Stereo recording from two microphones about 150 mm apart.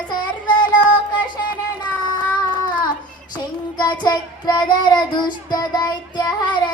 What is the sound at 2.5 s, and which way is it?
Child singing, 30° left (ahead or behind).